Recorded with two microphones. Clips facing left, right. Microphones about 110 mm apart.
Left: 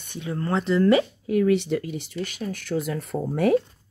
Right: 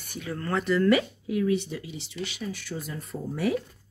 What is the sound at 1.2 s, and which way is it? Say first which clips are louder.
Speech: left 5 dB; 60° left (ahead or behind).